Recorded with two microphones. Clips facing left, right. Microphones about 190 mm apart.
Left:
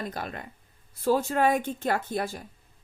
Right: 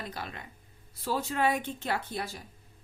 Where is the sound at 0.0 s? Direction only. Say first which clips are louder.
Left 5 dB; 50° left (ahead or behind).